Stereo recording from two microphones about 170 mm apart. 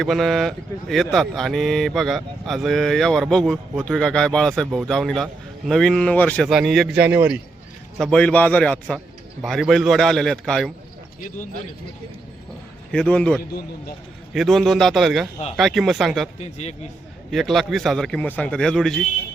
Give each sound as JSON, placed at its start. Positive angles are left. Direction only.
{"t": 0.0, "sound": "speech", "side_deg": 0}
{"t": 7.9, "sound": "a man's voice", "side_deg": 5}
{"t": 12.9, "sound": "a man's voice", "side_deg": 5}
{"t": 13.4, "sound": "a man's voice", "side_deg": 60}
{"t": 14.3, "sound": "speech", "side_deg": 0}
{"t": 16.4, "sound": "a man's voice", "side_deg": 40}
{"t": 17.3, "sound": "speech", "side_deg": 0}